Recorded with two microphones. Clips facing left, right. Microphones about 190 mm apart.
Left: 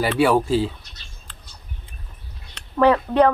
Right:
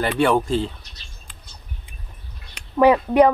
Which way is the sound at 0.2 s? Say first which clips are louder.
Left 1 dB; 5° left (ahead or behind).